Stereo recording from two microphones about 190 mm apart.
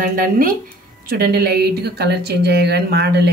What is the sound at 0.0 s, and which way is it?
Speech, 45° right (ahead or behind).